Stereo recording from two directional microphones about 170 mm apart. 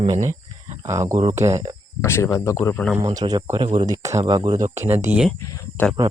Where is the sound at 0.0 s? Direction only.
35° right (ahead or behind).